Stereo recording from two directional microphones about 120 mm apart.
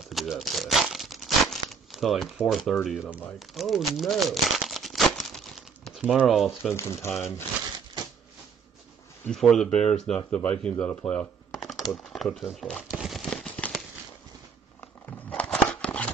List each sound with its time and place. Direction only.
0.1 s crumpling: centre (ahead or behind)
3.3 s speech: centre (ahead or behind)
5.9 s speech: 10° right (ahead or behind)
6.7 s speech: 20° left (ahead or behind)
9.3 s speech: 5° left (ahead or behind)
11.6 s speech: centre (ahead or behind)
12.9 s a sound: centre (ahead or behind)
15.0 s scissors: 10° left (ahead or behind)